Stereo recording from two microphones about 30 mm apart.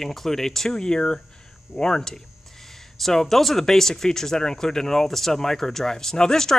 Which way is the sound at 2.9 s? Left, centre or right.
Centre.